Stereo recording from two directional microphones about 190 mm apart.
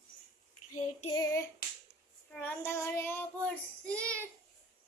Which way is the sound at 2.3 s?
10° left (ahead or behind).